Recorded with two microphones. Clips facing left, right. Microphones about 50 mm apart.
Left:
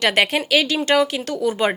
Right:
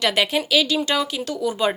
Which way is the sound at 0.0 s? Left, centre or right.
Left.